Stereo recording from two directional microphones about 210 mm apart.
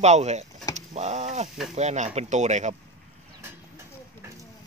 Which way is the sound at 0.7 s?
30° right (ahead or behind).